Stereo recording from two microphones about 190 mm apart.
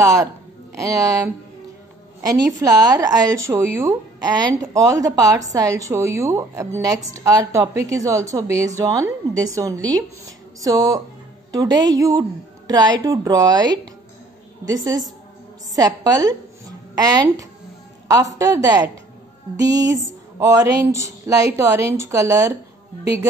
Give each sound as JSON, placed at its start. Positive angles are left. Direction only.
{"t": 0.0, "sound": "a woman's voice", "side_deg": -15}
{"t": 15.7, "sound": "a woman's voice", "side_deg": -20}